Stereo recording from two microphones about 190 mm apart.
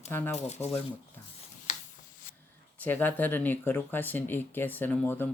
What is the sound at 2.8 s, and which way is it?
Speech, 10° left (ahead or behind).